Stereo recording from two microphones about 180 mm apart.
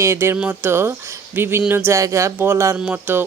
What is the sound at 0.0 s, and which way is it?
Speech, 15° right (ahead or behind).